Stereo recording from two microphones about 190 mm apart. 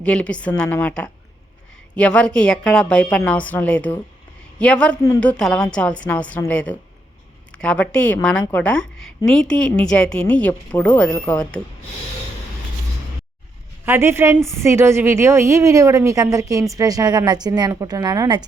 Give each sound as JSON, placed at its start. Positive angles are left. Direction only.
{"t": 0.0, "sound": "a woman's voice", "side_deg": 5}
{"t": 13.8, "sound": "a woman's voice", "side_deg": -10}